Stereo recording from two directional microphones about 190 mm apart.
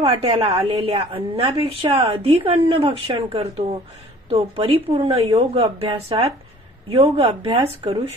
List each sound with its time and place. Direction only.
0.0 s a woman's voice: 30° right (ahead or behind)